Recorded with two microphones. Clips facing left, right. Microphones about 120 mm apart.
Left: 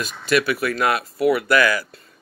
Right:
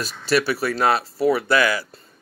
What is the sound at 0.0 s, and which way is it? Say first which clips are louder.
Speech: left 1 dB; 35° right (ahead or behind).